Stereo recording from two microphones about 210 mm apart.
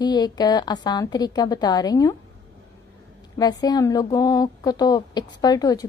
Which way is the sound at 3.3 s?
20° left (ahead or behind).